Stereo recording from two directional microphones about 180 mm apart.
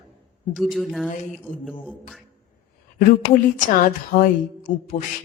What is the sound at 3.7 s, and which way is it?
A woman's voice, 50° left (ahead or behind).